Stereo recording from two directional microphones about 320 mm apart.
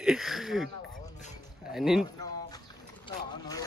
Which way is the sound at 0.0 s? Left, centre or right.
Centre.